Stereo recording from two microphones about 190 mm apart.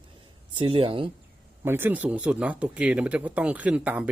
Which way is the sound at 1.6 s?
10° right (ahead or behind).